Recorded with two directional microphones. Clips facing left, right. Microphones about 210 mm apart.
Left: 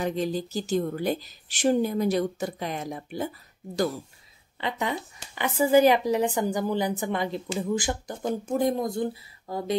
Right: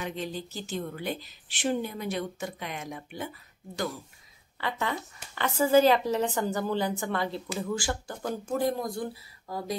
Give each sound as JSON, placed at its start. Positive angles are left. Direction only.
{"t": 0.0, "sound": "a woman's voice", "side_deg": 40}
{"t": 4.6, "sound": "a woman's voice", "side_deg": 20}